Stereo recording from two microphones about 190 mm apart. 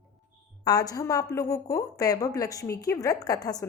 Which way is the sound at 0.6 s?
20° left (ahead or behind).